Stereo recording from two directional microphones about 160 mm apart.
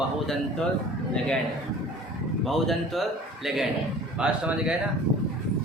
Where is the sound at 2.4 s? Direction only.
Centre (ahead or behind).